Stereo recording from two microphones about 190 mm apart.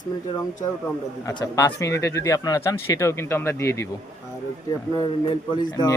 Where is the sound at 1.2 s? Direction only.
20° left (ahead or behind).